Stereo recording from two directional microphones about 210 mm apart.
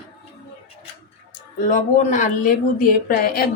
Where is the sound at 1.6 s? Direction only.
35° left (ahead or behind).